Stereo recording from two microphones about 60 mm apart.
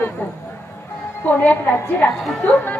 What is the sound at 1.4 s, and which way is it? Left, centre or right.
Speech, left.